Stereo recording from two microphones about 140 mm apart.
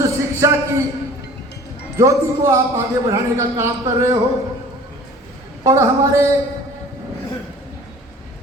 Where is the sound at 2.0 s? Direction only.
20° right (ahead or behind).